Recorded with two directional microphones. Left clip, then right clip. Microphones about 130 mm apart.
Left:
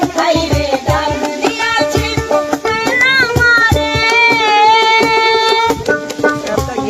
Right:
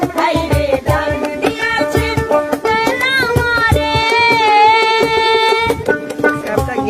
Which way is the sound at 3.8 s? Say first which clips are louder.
Left 2 dB; 35° right (ahead or behind).